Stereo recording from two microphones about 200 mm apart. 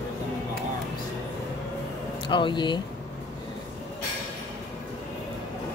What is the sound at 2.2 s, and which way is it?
Speech, 25° left (ahead or behind).